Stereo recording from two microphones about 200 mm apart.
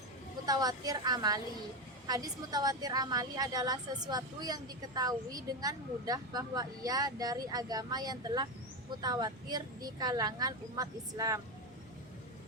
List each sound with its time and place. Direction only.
0.4 s a woman's voice: 20° right (ahead or behind)